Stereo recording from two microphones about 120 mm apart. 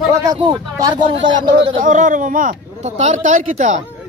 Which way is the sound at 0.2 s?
35° right (ahead or behind).